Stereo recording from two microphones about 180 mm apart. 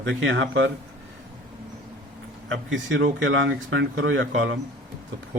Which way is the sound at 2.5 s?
90° right.